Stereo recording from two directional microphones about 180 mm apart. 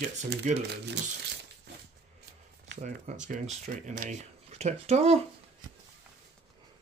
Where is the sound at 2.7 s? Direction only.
40° right (ahead or behind).